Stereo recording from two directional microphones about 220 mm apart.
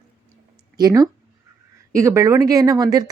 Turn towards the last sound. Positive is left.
turn(degrees=-15)  # may be behind; listen again after turning